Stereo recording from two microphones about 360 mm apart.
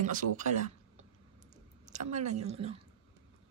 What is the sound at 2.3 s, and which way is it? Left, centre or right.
Speech, centre.